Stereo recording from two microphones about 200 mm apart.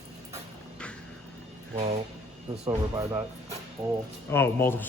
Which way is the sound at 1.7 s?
30° right (ahead or behind).